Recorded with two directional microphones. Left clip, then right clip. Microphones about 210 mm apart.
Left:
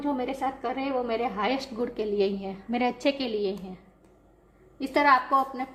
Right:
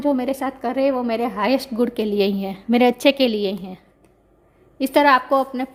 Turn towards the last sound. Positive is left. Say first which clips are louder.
# right 5 dB
turn(degrees=-55)  # may be behind; listen again after turning